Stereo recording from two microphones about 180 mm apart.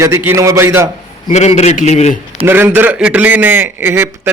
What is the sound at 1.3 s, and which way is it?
Speech, 40° left (ahead or behind).